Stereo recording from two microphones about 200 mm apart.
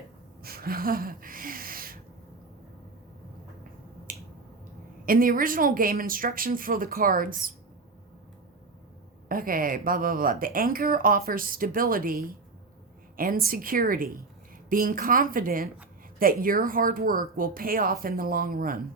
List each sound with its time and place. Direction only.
0.4 s a sound: 50° right (ahead or behind)
4.1 s finger snapping: 45° right (ahead or behind)
5.0 s speech: 45° right (ahead or behind)
9.3 s speech: 45° right (ahead or behind)